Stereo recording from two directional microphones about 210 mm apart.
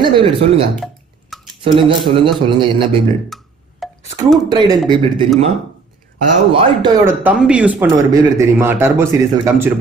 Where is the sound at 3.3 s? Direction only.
Centre (ahead or behind).